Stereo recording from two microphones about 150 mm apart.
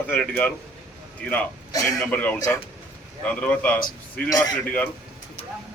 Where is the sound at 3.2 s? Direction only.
10° left (ahead or behind).